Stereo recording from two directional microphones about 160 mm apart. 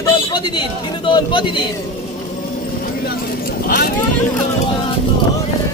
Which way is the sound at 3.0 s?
65° left (ahead or behind).